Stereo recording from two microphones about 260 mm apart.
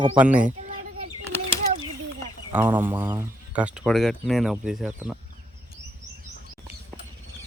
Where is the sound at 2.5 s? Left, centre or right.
Centre.